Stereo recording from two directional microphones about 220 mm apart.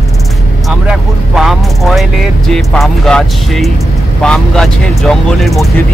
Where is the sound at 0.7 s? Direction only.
Centre (ahead or behind).